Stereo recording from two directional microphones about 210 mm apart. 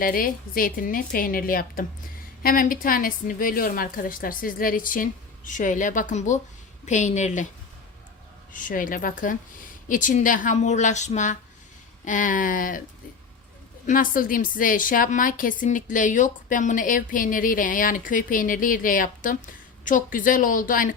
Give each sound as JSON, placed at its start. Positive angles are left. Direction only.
{"t": 0.0, "sound": "a woman's voice", "side_deg": 40}
{"t": 8.5, "sound": "a woman's voice", "side_deg": 40}
{"t": 13.8, "sound": "a woman's voice", "side_deg": 40}